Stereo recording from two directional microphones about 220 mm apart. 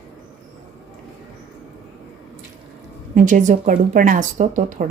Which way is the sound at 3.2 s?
35° right (ahead or behind).